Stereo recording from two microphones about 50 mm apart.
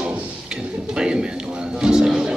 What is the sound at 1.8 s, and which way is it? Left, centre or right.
Music, centre.